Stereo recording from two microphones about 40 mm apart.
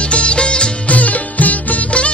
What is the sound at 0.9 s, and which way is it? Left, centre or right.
Music, left.